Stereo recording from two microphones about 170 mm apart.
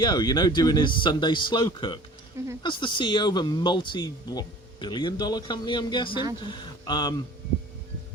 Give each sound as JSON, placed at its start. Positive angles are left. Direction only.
{"t": 0.0, "sound": "speech", "side_deg": 25}